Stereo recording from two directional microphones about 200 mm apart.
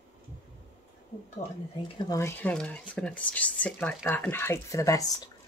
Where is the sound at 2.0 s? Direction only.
15° left (ahead or behind).